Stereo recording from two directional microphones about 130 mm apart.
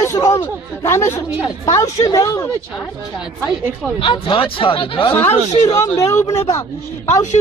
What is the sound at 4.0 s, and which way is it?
Speech, 40° left (ahead or behind).